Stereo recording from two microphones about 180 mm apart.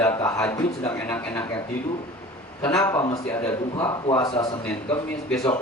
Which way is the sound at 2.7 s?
20° left (ahead or behind).